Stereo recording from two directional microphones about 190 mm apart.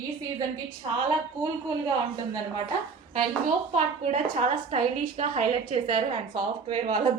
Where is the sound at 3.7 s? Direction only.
35° right (ahead or behind).